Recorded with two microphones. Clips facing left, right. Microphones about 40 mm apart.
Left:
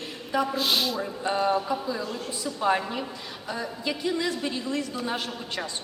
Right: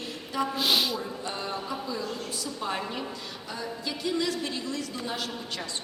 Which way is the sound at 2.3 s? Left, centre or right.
Left.